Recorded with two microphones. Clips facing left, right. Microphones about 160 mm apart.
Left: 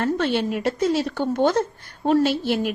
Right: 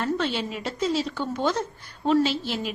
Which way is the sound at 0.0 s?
55° left (ahead or behind).